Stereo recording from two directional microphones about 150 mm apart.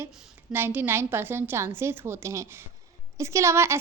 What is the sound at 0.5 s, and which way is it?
A woman's voice, 15° right (ahead or behind).